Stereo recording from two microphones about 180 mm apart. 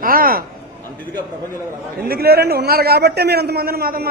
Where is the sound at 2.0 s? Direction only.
60° right (ahead or behind).